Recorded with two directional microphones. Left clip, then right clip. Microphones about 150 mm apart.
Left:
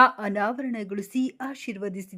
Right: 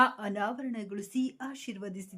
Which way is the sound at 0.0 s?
40° left (ahead or behind).